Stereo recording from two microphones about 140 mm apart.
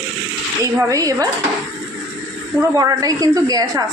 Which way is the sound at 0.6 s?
20° right (ahead or behind).